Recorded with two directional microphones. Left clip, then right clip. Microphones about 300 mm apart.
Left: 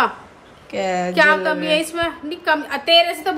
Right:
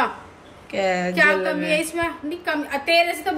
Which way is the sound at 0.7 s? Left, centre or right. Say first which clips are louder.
Left 1 dB; centre.